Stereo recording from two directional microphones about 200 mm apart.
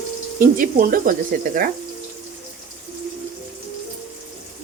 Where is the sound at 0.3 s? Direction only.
45° right (ahead or behind).